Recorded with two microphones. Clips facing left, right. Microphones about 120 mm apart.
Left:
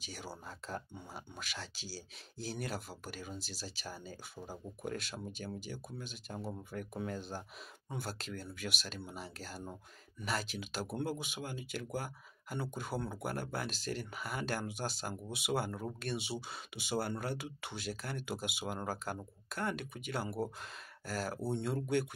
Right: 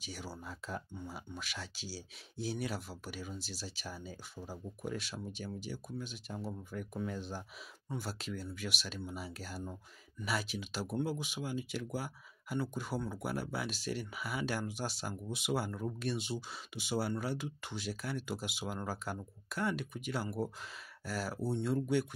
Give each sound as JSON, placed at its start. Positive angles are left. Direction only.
{"t": 0.0, "sound": "speech", "side_deg": 0}